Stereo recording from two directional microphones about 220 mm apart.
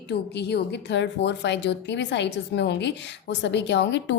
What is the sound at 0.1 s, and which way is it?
A woman's voice, 50° left (ahead or behind).